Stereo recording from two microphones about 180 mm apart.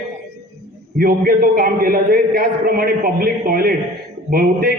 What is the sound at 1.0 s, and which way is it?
A man's voice, 55° right (ahead or behind).